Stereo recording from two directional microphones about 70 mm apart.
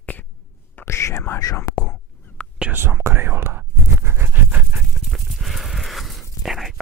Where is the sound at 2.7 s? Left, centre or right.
Right.